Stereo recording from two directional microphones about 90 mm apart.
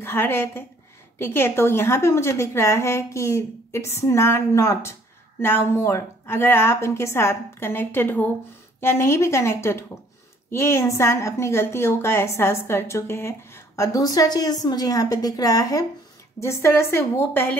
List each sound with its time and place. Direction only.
0.0 s a woman's voice: 25° left (ahead or behind)
13.9 s a woman's voice: 45° left (ahead or behind)
16.3 s a woman's voice: 30° left (ahead or behind)